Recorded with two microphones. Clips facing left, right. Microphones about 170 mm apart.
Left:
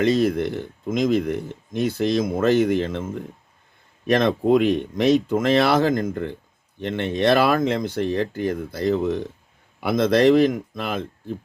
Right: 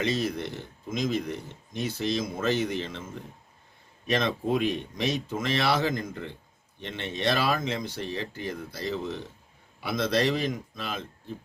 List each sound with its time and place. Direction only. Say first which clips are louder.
0.0 s speech: left 9 dB; 55° left (ahead or behind)